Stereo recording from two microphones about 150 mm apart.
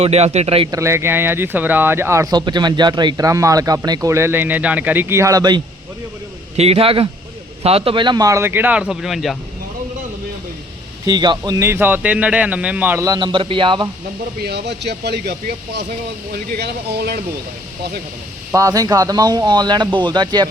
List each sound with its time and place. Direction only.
0.0 s speech: 45° right (ahead or behind)
0.7 s speech: 20° right (ahead or behind)
6.6 s a man's voice: 40° right (ahead or behind); by 9.4 s centre (ahead or behind)
11.0 s a man's voice: 30° right (ahead or behind); by 13.1 s 10° right (ahead or behind)
13.1 s speech: 30° right (ahead or behind)
14.3 s speech: 90° right
18.5 s speech: 20° right (ahead or behind)